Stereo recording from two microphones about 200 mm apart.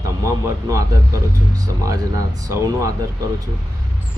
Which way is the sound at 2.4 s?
15° right (ahead or behind).